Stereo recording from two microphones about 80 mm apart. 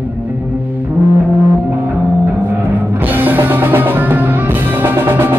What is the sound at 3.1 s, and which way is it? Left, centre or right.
Music, right.